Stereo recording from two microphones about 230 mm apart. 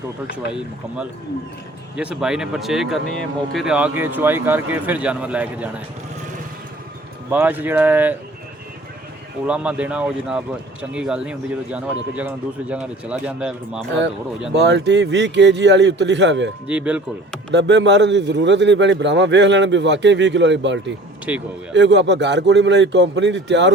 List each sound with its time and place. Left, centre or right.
2.0 s speech: centre
7.3 s speech: centre
9.5 s speech: centre
14.5 s a man's voice: right
16.6 s speech: centre
17.5 s a man's voice: right
21.3 s speech: centre
21.7 s a man's voice: right